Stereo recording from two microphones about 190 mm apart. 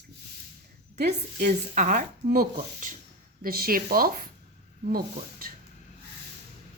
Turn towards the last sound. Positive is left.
turn(degrees=-50)  # may be behind; listen again after turning